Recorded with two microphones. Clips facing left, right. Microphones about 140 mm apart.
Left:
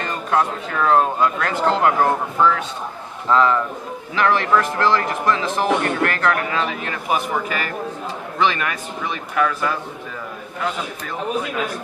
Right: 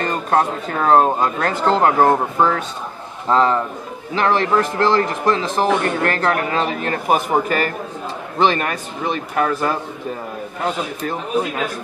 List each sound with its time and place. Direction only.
0.0 s speech: 40° right (ahead or behind)